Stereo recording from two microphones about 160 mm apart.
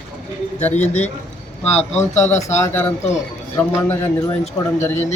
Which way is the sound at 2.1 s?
45° left (ahead or behind).